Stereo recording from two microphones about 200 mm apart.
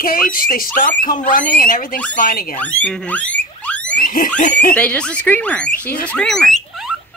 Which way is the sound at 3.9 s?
45° left (ahead or behind).